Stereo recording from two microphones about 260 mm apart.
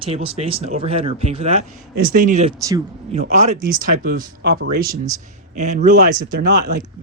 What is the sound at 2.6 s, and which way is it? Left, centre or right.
Speech, centre.